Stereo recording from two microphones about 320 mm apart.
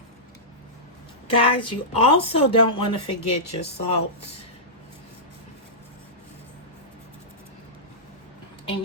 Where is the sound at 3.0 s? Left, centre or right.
Left.